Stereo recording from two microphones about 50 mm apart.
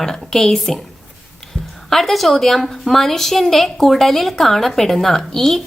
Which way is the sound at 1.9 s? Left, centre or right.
Centre.